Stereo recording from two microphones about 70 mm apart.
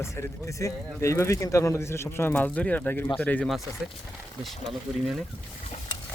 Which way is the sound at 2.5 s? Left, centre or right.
Centre.